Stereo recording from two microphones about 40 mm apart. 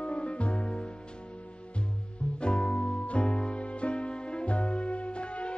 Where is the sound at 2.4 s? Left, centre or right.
Left.